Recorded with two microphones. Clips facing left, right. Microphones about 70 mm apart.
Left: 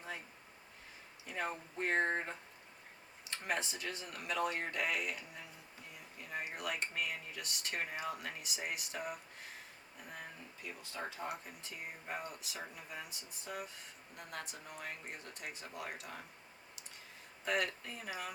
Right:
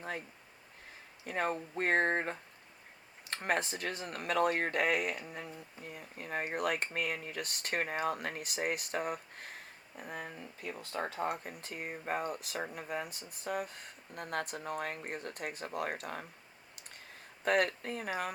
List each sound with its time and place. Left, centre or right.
1.2 s speech: right
17.4 s speech: right